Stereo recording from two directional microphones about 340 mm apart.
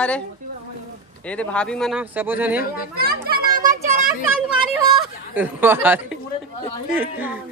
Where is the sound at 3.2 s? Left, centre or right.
Right.